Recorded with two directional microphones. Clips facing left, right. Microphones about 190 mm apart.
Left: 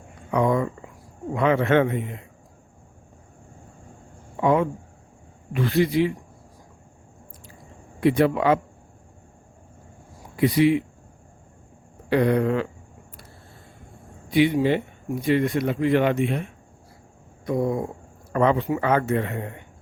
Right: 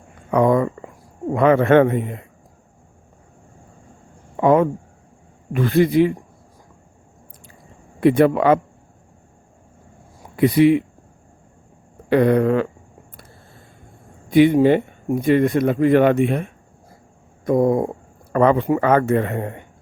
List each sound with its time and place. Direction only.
0.3 s a sound: 55° right (ahead or behind)
1.3 s speech: 50° right (ahead or behind)
4.4 s speech: 50° right (ahead or behind)
8.0 s speech: 55° right (ahead or behind)
10.3 s speech: 55° right (ahead or behind)
12.1 s speech: 55° right (ahead or behind)
14.3 s speech: 50° right (ahead or behind)